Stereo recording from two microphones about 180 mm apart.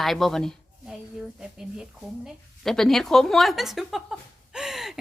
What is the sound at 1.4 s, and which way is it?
A woman's voice, 5° right (ahead or behind).